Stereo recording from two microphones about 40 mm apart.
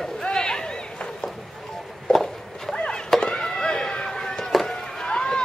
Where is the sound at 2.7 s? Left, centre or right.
Left.